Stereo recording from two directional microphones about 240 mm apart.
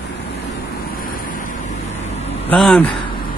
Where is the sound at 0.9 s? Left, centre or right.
Left.